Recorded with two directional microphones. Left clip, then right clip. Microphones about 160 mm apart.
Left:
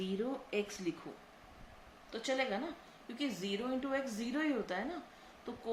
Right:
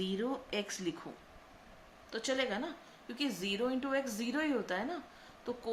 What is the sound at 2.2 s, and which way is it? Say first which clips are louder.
A woman's voice: right 1 dB; 30° right (ahead or behind).